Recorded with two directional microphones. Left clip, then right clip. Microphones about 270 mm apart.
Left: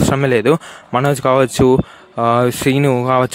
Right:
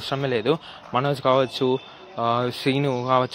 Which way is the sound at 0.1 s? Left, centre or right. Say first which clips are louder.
Left 7 dB; left.